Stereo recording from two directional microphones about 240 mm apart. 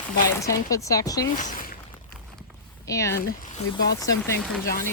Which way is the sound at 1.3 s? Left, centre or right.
Left.